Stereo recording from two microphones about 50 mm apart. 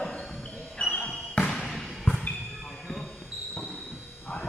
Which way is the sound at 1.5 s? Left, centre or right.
Centre.